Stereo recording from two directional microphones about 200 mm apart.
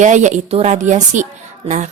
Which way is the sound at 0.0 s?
35° right (ahead or behind).